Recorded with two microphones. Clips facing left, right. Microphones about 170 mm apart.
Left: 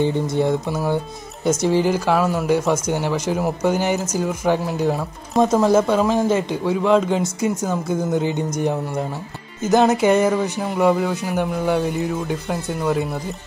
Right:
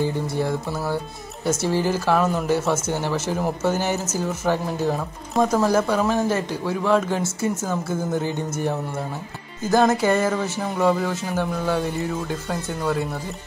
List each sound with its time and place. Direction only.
0.0 s speech: 20° left (ahead or behind)
5.4 s speech: 20° left (ahead or behind)